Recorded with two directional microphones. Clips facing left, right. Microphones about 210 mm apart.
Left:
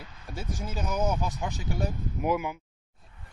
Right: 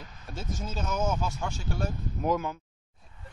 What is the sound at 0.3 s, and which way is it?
Speech, 15° left (ahead or behind).